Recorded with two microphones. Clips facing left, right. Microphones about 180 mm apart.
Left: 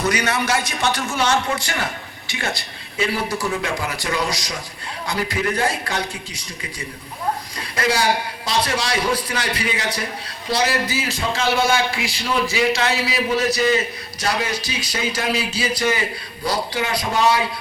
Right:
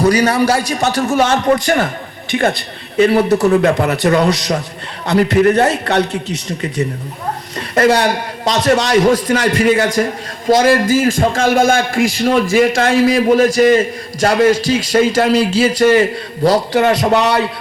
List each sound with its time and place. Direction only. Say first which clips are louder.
0.0 s a man's voice: right 9 dB; 35° right (ahead or behind); by 5.6 s 55° right (ahead or behind)
5.6 s a man's voice: right 9 dB; 70° right (ahead or behind)
7.8 s a man's voice: right 8 dB; 65° right (ahead or behind)
8.7 s a man's voice: right 10 dB; 45° right (ahead or behind)
9.1 s a man's voice: right 11 dB; 85° right
9.6 s a man's voice: right 12 dB; 45° right (ahead or behind)
14.5 s speech: right 12 dB; 90° right
15.8 s a man's voice: right 12 dB; 50° right (ahead or behind)
16.4 s a man's voice: right 11 dB; 75° right (ahead or behind)